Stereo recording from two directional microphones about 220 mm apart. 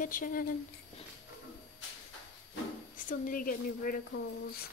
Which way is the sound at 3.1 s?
40° left (ahead or behind).